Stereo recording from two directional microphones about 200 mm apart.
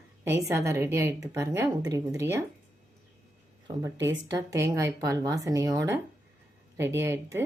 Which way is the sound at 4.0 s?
65° right (ahead or behind).